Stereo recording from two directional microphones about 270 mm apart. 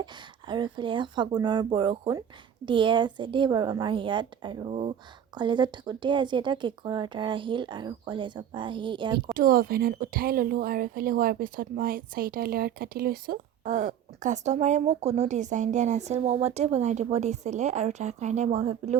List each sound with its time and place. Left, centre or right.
0.0 s a woman's voice: centre
9.3 s speech: right